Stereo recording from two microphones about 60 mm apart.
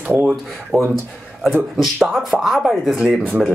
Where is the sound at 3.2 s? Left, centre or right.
Right.